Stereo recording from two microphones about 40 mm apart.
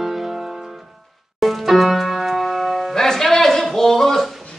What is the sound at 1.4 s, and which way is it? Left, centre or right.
Music, centre.